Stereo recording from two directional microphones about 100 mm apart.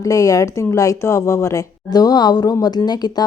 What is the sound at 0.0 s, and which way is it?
Speech, 35° left (ahead or behind).